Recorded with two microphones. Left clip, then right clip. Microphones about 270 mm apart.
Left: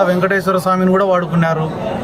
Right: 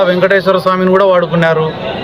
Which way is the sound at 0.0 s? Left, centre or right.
Centre.